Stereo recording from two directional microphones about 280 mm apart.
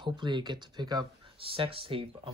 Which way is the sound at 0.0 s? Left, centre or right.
Centre.